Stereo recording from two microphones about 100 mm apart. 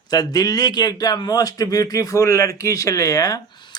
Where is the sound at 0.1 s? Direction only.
40° left (ahead or behind).